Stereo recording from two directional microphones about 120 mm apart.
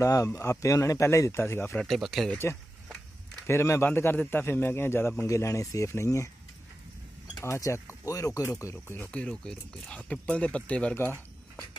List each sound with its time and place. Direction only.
0.0 s a man's voice: 25° left (ahead or behind)
1.8 s speech: centre (ahead or behind)
3.4 s a man's voice: 25° left (ahead or behind)
7.3 s a man's voice: 25° left (ahead or behind)